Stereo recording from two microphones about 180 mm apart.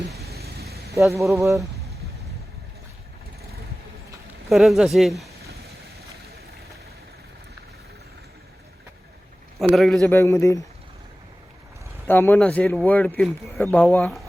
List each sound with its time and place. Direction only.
0.3 s vehicle: 60° right (ahead or behind)
1.2 s speech: 15° right (ahead or behind)
4.4 s speech: centre (ahead or behind)
9.6 s speech: centre (ahead or behind)
10.1 s speech: 15° left (ahead or behind)
12.0 s speech: 10° left (ahead or behind)